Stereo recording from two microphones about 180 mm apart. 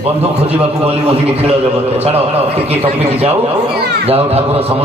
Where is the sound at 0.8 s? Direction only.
35° right (ahead or behind).